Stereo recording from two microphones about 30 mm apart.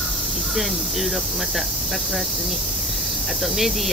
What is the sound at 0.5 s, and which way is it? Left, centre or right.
Cricket, centre.